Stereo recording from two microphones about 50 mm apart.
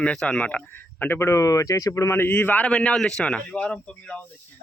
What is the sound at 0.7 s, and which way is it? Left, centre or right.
Speech, left.